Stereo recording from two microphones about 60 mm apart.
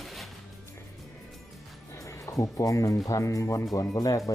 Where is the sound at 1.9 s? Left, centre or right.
Left.